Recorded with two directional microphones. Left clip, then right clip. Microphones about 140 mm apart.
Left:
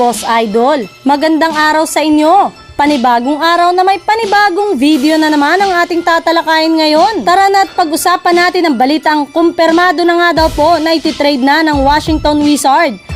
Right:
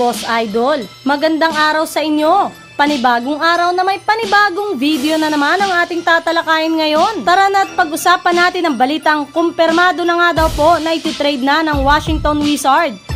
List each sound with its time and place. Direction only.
0.3 s music: 40° left (ahead or behind)
7.3 s a woman's voice: 45° left (ahead or behind)